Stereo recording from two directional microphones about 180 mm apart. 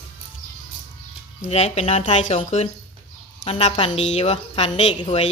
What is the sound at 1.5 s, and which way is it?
A woman's voice, 35° left (ahead or behind).